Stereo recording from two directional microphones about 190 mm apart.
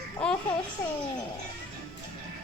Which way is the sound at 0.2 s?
5° left (ahead or behind).